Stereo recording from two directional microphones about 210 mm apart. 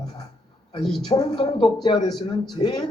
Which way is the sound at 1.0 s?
20° left (ahead or behind).